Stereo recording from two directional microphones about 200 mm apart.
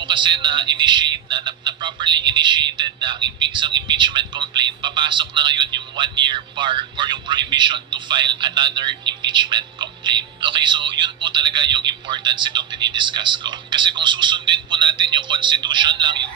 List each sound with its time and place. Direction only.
0.1 s speech: 25° right (ahead or behind)